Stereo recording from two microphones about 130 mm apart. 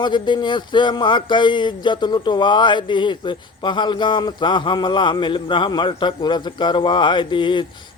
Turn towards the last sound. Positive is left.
turn(degrees=35)  # may be behind; listen again after turning